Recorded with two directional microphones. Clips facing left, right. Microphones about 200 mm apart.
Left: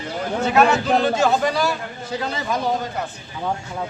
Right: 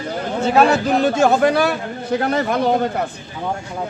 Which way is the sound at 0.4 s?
30° right (ahead or behind).